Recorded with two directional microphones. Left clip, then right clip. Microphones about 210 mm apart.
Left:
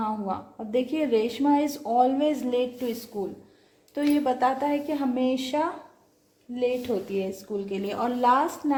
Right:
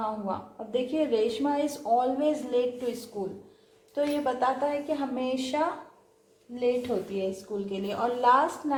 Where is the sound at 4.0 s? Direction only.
50° left (ahead or behind).